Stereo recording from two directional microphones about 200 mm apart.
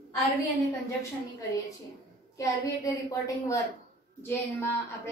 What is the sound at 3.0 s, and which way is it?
A woman's voice, 15° left (ahead or behind).